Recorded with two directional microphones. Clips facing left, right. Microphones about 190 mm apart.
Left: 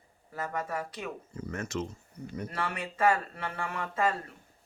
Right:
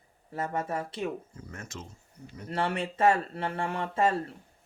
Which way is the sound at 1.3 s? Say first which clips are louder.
Left 8 dB; 75° left (ahead or behind).